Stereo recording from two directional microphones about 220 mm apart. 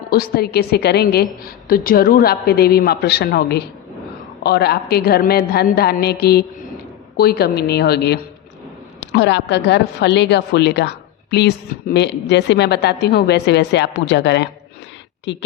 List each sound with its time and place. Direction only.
0.1 s a woman's voice: 45° left (ahead or behind)